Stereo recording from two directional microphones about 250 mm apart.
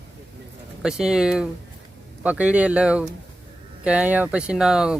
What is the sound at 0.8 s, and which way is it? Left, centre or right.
Speech, centre.